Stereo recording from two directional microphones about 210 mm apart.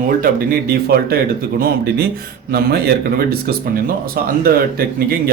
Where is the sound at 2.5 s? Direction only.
45° right (ahead or behind).